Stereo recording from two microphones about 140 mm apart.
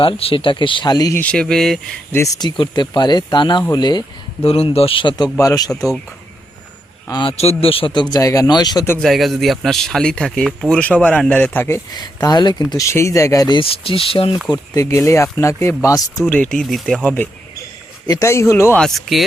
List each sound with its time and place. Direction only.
0.0 s speech: 40° left (ahead or behind)
1.2 s speech: 5° left (ahead or behind)
2.1 s speech: 25° left (ahead or behind)
4.4 s speech: 45° left (ahead or behind); by 5.7 s 25° left (ahead or behind)
7.1 s speech: 35° left (ahead or behind)
7.3 s speech: 45° left (ahead or behind); by 8.8 s 30° left (ahead or behind)
9.0 s speech: centre (ahead or behind); by 11.8 s 15° left (ahead or behind)
11.9 s speech: 30° left (ahead or behind)
13.6 s speech: 40° left (ahead or behind)
14.7 s speech: 20° left (ahead or behind)
16.2 s speech: 10° left (ahead or behind)
18.1 s speech: 20° left (ahead or behind)
18.8 s speech: centre (ahead or behind)